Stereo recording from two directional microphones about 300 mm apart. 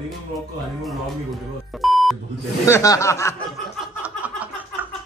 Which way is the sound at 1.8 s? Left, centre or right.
Centre.